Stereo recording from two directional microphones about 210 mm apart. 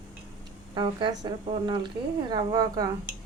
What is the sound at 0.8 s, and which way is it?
Speech, 20° right (ahead or behind).